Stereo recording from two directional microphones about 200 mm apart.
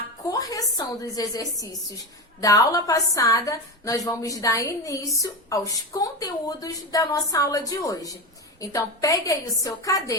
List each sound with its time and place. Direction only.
0.3 s a woman's voice: 15° left (ahead or behind)